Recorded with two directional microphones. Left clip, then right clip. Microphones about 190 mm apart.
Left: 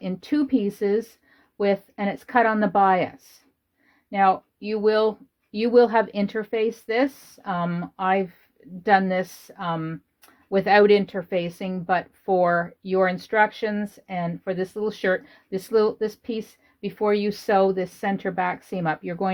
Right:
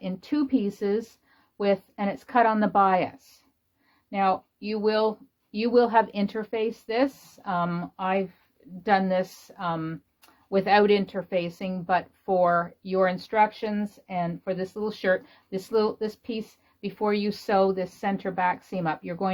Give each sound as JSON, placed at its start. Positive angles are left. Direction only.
{"t": 0.0, "sound": "a woman's voice", "side_deg": 45}